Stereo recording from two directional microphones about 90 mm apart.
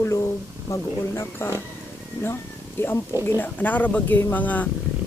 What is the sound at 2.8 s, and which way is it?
Speech, 25° left (ahead or behind).